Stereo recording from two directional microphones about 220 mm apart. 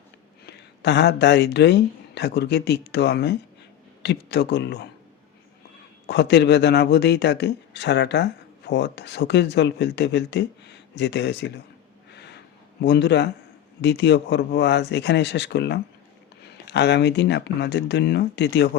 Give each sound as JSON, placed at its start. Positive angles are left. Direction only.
{"t": 0.4, "sound": "a man's voice", "side_deg": 50}
{"t": 6.1, "sound": "a man's voice", "side_deg": 50}
{"t": 12.1, "sound": "a sound", "side_deg": 50}
{"t": 12.8, "sound": "a man's voice", "side_deg": 50}